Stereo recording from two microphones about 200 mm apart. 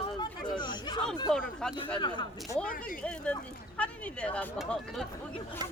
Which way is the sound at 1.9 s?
25° left (ahead or behind).